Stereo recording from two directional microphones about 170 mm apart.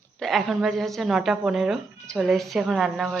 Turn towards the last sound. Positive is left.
turn(degrees=0)  # may be behind; listen again after turning